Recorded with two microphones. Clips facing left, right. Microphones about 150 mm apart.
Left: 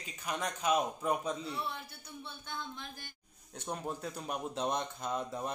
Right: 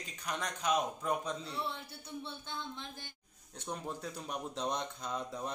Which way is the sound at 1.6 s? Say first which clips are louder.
Even; 25° right (ahead or behind).